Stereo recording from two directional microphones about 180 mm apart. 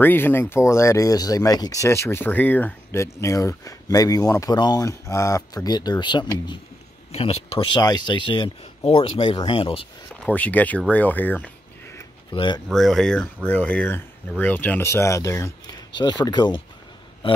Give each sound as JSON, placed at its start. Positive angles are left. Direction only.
{"t": 0.0, "sound": "speech", "side_deg": 10}
{"t": 10.2, "sound": "speech", "side_deg": 10}
{"t": 12.3, "sound": "speech", "side_deg": 25}
{"t": 12.6, "sound": "speech", "side_deg": 0}